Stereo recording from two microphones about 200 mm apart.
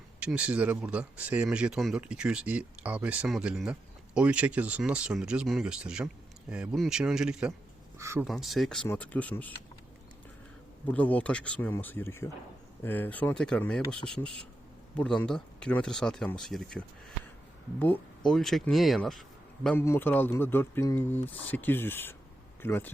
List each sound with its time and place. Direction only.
0.2 s speech: 5° right (ahead or behind)
8.3 s speech: centre (ahead or behind)
10.8 s speech: 5° left (ahead or behind)